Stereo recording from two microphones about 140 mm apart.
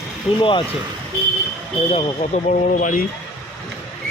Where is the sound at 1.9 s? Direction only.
50° left (ahead or behind).